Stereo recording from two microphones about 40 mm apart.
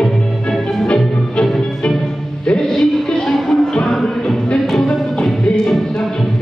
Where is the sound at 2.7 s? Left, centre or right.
Centre.